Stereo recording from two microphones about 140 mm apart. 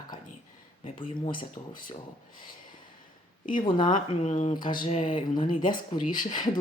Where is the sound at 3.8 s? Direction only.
60° left (ahead or behind).